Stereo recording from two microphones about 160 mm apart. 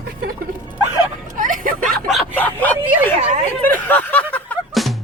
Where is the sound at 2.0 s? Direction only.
5° left (ahead or behind).